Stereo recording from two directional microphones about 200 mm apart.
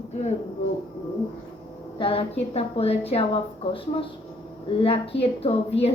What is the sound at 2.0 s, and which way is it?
A woman's voice, 30° left (ahead or behind).